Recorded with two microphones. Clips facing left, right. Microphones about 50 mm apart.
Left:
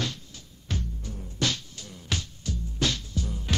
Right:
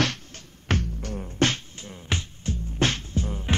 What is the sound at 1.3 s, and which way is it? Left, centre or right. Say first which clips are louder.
Beatboxing: right 5 dB; right.